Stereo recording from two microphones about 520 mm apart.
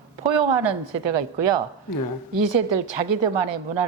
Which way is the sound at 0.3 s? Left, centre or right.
Right.